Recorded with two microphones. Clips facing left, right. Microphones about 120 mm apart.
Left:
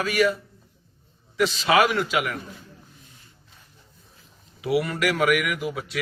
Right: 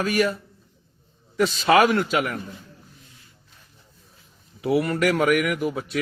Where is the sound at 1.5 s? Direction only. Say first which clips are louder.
Right 3 dB; 50° right (ahead or behind).